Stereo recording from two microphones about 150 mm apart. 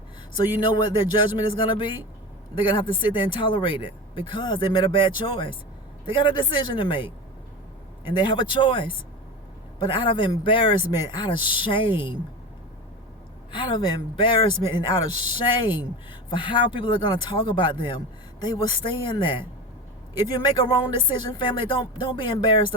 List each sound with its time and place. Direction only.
0.7 s speech: 30° left (ahead or behind)
6.6 s speech: 35° left (ahead or behind)
13.5 s a man's voice: 30° left (ahead or behind)